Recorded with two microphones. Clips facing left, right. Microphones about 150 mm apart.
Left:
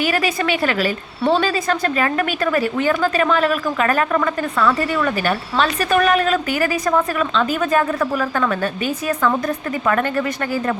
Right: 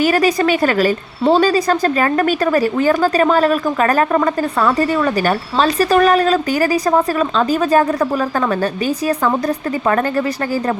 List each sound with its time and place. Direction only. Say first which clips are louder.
0.0 s speech: right 6 dB; 40° right (ahead or behind)
9.8 s speech: right 2 dB; 35° right (ahead or behind)